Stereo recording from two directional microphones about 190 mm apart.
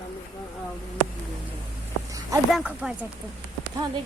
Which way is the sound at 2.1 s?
15° right (ahead or behind).